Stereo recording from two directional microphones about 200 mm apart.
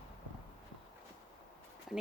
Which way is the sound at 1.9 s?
Centre (ahead or behind).